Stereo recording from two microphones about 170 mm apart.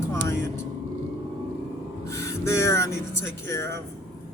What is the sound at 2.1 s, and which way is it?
A woman's voice, 15° left (ahead or behind).